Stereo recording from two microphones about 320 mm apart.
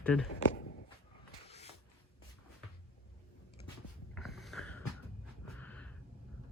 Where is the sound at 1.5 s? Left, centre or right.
Centre.